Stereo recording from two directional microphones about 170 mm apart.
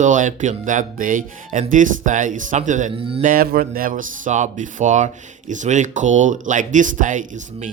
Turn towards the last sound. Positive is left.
turn(degrees=-50)  # may be behind; listen again after turning